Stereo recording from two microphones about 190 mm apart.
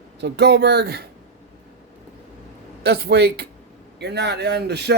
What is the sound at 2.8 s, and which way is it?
Speech, 55° right (ahead or behind).